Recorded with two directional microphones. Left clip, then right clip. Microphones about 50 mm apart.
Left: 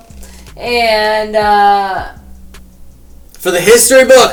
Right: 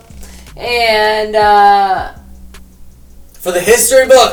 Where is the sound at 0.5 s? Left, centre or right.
Centre.